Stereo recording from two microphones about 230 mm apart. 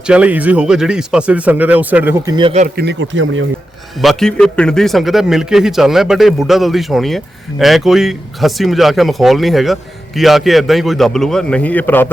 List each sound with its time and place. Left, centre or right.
0.1 s speech: centre; by 2.8 s right
2.8 s speech: right
4.0 s a man's voice: centre